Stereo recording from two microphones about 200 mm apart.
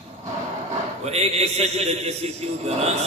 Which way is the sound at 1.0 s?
30° right (ahead or behind).